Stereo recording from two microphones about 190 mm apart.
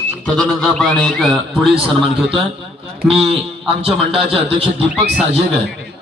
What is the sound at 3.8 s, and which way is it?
Speech, 30° right (ahead or behind).